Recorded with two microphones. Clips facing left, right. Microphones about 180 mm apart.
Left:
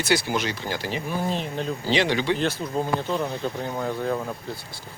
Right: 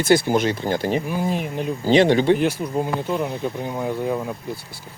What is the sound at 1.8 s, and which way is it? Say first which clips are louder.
Speech: right 8 dB; 50° right (ahead or behind).